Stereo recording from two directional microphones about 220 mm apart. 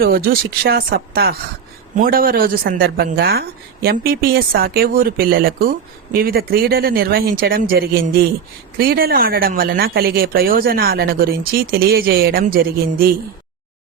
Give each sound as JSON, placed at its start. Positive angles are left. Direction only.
{"t": 0.0, "sound": "speech", "side_deg": -40}